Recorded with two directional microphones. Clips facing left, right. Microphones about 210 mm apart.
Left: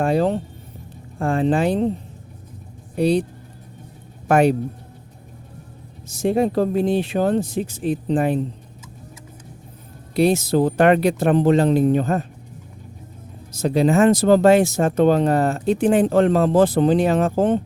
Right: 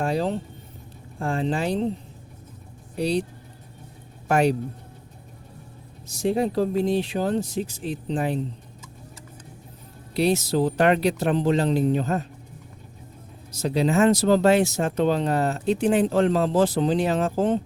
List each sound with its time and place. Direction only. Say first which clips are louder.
0.0 s speech: left 6 dB; 55° left (ahead or behind)
3.0 s speech: left 6 dB; 55° left (ahead or behind)
4.3 s speech: left 5 dB; 55° left (ahead or behind)
6.1 s speech: left 4 dB; 55° left (ahead or behind)
10.2 s speech: left 4 dB; 50° left (ahead or behind)
13.5 s speech: left 5 dB; 50° left (ahead or behind)